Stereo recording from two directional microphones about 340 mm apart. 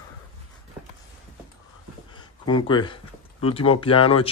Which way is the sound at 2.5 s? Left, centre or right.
Centre.